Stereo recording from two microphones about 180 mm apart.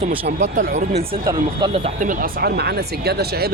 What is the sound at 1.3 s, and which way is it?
Speech, 25° right (ahead or behind).